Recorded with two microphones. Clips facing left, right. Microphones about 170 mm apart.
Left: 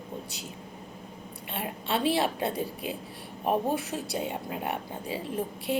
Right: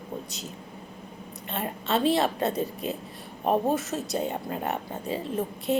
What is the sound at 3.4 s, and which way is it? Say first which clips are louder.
Speech: right 3 dB; 20° right (ahead or behind).